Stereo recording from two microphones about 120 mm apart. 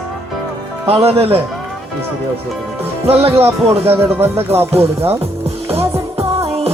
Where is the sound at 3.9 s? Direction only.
20° right (ahead or behind).